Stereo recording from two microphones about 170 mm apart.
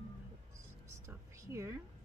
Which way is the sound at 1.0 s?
15° right (ahead or behind).